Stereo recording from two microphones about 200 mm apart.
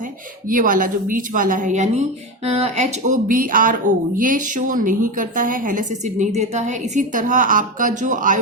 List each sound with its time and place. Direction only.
0.5 s a woman's voice: 40° right (ahead or behind)